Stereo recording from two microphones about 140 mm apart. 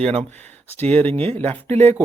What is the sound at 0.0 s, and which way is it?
Speech, 50° right (ahead or behind).